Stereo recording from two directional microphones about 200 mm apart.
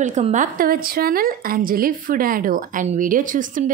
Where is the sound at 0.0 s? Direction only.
35° right (ahead or behind).